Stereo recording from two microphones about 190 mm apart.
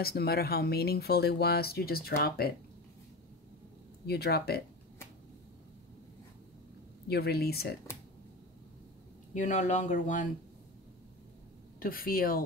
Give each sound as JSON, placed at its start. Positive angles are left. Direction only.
{"t": 0.0, "sound": "speech", "side_deg": 55}
{"t": 4.0, "sound": "speech", "side_deg": 55}
{"t": 7.1, "sound": "speech", "side_deg": 55}
{"t": 9.3, "sound": "speech", "side_deg": 40}
{"t": 11.8, "sound": "speech", "side_deg": 50}